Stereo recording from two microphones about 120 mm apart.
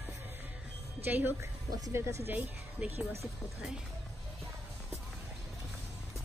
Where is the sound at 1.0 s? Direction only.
15° right (ahead or behind).